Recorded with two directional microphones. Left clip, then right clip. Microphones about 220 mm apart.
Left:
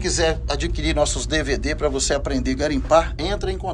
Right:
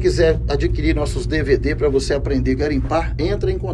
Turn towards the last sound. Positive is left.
turn(degrees=10)  # may be behind; listen again after turning